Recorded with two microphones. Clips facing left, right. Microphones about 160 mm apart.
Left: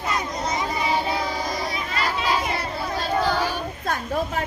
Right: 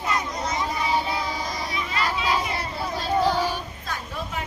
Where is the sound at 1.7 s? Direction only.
40° left (ahead or behind).